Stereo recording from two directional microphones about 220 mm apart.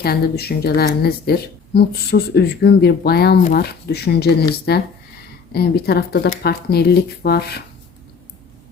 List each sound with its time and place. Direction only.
0.0 s speech: 45° left (ahead or behind)